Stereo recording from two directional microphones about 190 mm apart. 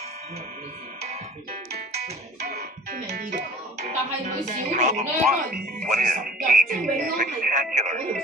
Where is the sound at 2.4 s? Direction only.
55° right (ahead or behind).